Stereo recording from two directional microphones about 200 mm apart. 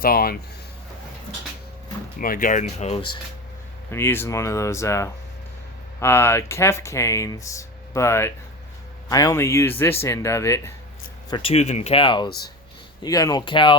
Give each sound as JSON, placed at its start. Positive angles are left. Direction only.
{"t": 0.0, "sound": "speech", "side_deg": 50}
{"t": 2.1, "sound": "speech", "side_deg": 45}
{"t": 3.9, "sound": "speech", "side_deg": 10}
{"t": 11.3, "sound": "speech", "side_deg": 25}